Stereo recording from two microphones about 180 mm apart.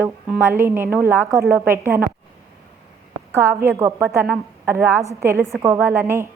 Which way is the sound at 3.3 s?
15° right (ahead or behind).